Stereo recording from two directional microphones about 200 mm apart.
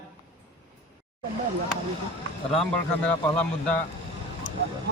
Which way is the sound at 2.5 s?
5° left (ahead or behind).